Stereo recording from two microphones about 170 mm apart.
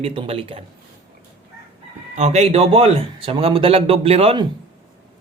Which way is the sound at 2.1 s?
40° right (ahead or behind).